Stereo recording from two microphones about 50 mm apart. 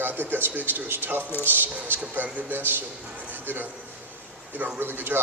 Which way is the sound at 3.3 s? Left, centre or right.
Right.